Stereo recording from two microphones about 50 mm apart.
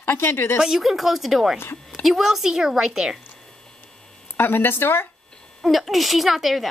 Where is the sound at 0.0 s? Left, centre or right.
Left.